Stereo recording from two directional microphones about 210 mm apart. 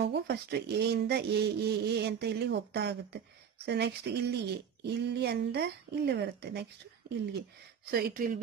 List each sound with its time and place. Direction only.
0.0 s speech: 50° right (ahead or behind)
7.9 s speech: 45° right (ahead or behind)